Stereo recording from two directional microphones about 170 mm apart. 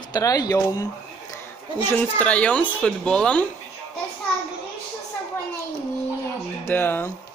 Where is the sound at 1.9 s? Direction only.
10° left (ahead or behind).